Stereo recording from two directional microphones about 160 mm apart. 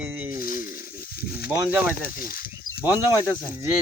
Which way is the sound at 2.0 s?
65° left (ahead or behind).